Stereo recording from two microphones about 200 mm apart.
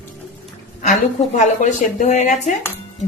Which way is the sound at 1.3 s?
35° left (ahead or behind).